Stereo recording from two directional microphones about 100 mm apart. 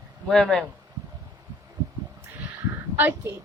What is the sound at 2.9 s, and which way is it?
Speech, 20° right (ahead or behind).